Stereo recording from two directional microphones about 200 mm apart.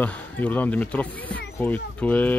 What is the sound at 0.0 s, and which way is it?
Speech, 10° left (ahead or behind).